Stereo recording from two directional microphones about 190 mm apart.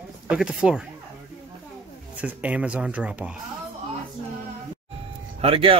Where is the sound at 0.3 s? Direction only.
5° right (ahead or behind).